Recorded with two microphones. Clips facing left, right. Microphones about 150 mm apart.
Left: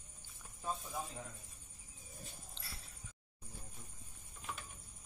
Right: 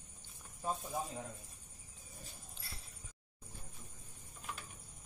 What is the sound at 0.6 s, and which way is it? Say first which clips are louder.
Speech: right 3 dB; 15° right (ahead or behind).